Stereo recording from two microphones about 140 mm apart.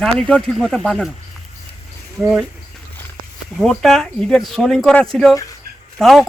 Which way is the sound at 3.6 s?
Centre (ahead or behind).